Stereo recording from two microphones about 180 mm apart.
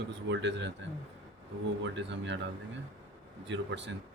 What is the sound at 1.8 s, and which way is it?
Speech, 85° right.